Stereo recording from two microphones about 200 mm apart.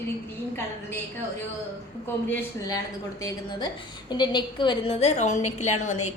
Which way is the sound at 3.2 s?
20° left (ahead or behind).